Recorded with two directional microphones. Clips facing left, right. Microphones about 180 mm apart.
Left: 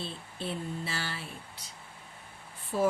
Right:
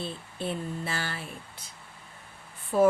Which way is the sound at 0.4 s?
50° right (ahead or behind).